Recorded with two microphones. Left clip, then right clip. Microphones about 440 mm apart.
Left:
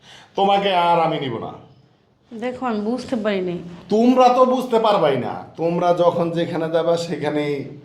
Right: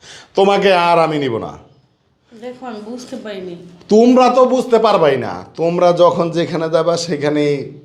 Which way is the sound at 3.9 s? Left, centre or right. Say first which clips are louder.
Right 4 dB; right.